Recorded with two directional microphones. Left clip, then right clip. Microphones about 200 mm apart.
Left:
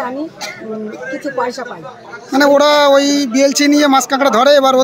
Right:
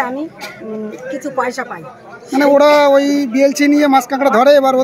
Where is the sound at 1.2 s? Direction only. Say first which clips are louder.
Right 1 dB; centre (ahead or behind).